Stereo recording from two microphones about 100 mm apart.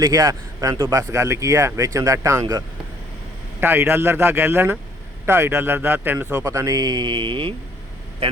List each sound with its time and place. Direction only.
0.0 s speech: 40° right (ahead or behind)
3.6 s a man's voice: 25° right (ahead or behind); by 7.5 s 55° right (ahead or behind)